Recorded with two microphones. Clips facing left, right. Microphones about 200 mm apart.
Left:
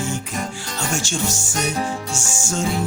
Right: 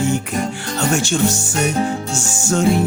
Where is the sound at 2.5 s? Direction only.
60° right (ahead or behind).